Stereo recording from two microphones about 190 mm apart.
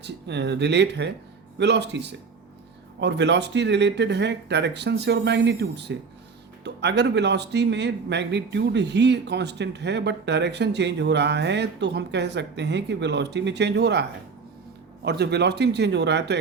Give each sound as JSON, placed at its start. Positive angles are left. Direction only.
{"t": 0.0, "sound": "speech", "side_deg": -65}
{"t": 15.0, "sound": "speech", "side_deg": -60}